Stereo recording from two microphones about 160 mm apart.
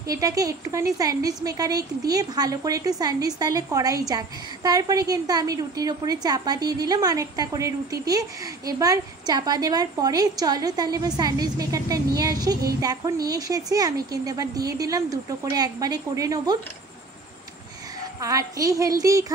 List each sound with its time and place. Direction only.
0.1 s a woman's voice: 20° right (ahead or behind)
18.2 s a woman's voice: 20° right (ahead or behind)